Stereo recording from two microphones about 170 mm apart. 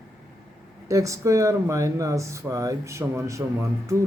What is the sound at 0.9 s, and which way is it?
Speech, 20° right (ahead or behind).